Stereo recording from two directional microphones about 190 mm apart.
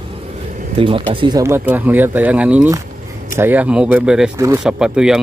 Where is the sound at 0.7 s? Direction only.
30° right (ahead or behind).